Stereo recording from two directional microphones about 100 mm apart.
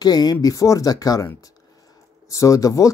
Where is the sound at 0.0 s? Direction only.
40° left (ahead or behind).